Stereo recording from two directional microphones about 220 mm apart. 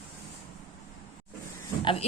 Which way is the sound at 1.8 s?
25° left (ahead or behind).